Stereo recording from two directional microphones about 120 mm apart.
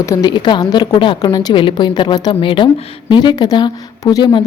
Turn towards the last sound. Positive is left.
turn(degrees=35)  # may be behind; listen again after turning